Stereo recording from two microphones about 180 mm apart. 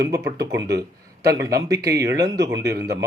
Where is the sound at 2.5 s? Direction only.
65° right (ahead or behind).